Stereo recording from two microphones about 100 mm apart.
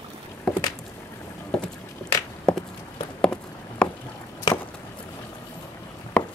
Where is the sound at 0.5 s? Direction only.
5° left (ahead or behind).